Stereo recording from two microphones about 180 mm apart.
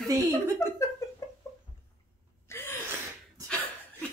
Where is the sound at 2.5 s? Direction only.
10° left (ahead or behind).